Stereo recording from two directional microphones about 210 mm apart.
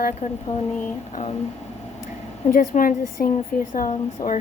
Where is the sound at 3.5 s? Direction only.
5° left (ahead or behind).